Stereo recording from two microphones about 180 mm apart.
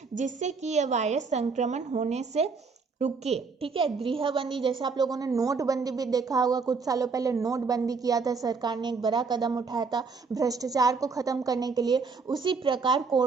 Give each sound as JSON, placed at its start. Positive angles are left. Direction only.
{"t": 0.2, "sound": "a woman's voice", "side_deg": -45}